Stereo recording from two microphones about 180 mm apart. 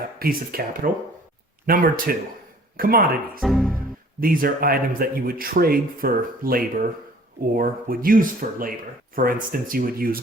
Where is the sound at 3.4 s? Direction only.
Centre (ahead or behind).